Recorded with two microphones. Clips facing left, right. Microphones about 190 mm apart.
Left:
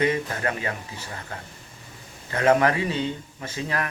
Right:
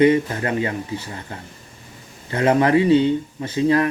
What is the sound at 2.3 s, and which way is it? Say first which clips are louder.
Speech: right 4 dB; 25° right (ahead or behind).